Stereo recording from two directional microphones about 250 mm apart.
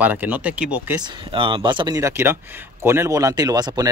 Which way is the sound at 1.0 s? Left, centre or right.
Centre.